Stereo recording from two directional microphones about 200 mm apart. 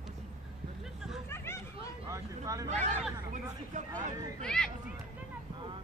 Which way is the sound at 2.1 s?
15° right (ahead or behind).